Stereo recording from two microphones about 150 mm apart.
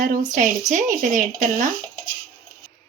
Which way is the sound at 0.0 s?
65° right (ahead or behind).